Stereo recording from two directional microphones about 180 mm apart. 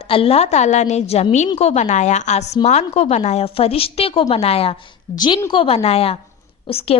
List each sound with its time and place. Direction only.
0.1 s a woman's voice: 30° left (ahead or behind)